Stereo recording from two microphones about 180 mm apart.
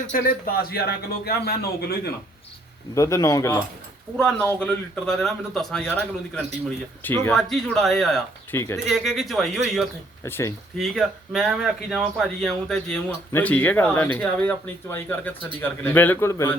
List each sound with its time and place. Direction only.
0.1 s speech: 55° left (ahead or behind)
2.9 s speech: 15° left (ahead or behind)
4.2 s a man's voice: 5° left (ahead or behind)
7.3 s a man's voice: centre (ahead or behind)
8.5 s speech: 15° left (ahead or behind)
8.9 s a man's voice: centre (ahead or behind)
10.2 s speech: 10° left (ahead or behind)
10.8 s speech: centre (ahead or behind)